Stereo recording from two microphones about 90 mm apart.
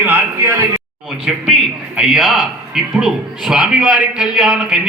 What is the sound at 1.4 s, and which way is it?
Speech, 5° right (ahead or behind).